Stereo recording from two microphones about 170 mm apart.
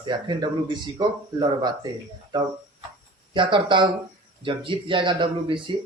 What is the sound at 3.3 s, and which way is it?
Speech, 30° right (ahead or behind).